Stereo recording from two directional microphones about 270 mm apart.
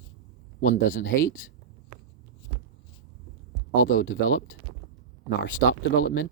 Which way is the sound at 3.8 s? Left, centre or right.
Left.